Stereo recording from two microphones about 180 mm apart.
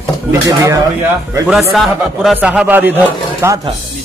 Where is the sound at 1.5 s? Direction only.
Centre (ahead or behind).